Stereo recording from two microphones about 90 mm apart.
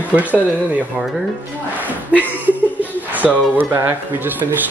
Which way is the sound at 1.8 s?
20° right (ahead or behind).